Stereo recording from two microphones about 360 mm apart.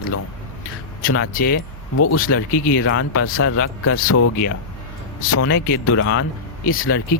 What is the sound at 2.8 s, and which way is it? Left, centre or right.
Speech, left.